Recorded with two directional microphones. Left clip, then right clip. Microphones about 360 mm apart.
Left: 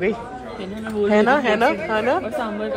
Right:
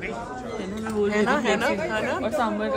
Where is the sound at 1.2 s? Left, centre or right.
Centre.